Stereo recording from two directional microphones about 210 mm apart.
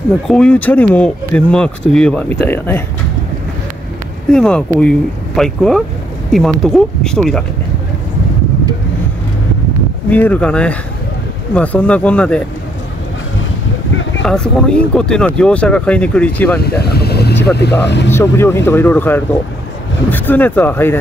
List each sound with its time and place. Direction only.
0.3 s speech: 5° left (ahead or behind)
4.3 s speech: 5° left (ahead or behind)
10.0 s speech: 10° left (ahead or behind)
14.2 s speech: 5° left (ahead or behind)
16.8 s speech: 50° left (ahead or behind)
18.1 s speech: 10° left (ahead or behind)